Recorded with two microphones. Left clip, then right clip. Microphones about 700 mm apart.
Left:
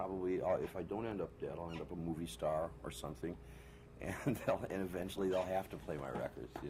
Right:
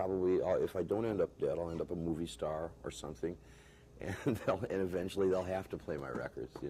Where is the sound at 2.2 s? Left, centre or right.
Right.